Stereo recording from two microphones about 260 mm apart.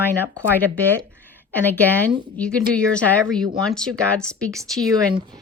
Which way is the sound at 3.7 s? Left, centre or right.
Centre.